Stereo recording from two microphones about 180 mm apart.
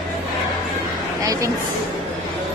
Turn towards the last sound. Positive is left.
turn(degrees=-20)  # may be behind; listen again after turning